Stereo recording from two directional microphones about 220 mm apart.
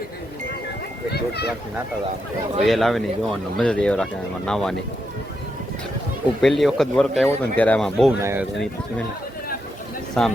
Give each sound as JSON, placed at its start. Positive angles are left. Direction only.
{"t": 1.1, "sound": "speech", "side_deg": 50}
{"t": 2.6, "sound": "speech", "side_deg": 0}
{"t": 6.4, "sound": "speech", "side_deg": 0}
{"t": 8.2, "sound": "speech", "side_deg": -10}
{"t": 10.2, "sound": "speech", "side_deg": 5}